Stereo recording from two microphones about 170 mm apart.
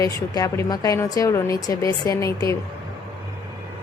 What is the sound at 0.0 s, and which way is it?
A woman's voice, 20° left (ahead or behind).